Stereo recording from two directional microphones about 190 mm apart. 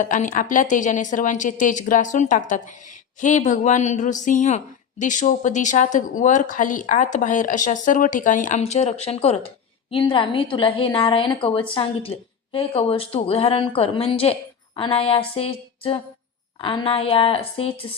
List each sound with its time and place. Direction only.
0.0 s a woman's voice: 40° left (ahead or behind)